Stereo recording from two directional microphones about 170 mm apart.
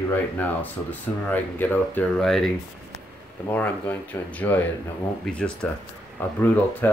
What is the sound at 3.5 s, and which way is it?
Speech, 10° left (ahead or behind).